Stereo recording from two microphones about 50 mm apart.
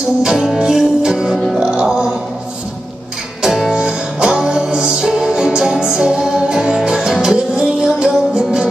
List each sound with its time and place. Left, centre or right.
0.2 s music: centre
3.4 s music: centre
3.7 s music: centre